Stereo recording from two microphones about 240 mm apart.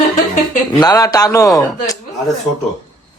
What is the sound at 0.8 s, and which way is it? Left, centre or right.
A man's voice, centre.